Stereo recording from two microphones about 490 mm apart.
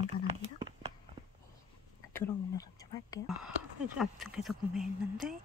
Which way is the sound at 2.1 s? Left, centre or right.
Centre.